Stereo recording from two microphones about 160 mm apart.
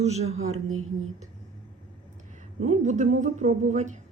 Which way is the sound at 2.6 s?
45° right (ahead or behind).